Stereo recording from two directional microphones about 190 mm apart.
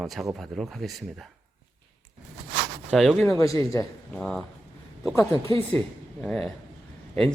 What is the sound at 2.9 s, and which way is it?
Speech, 5° left (ahead or behind).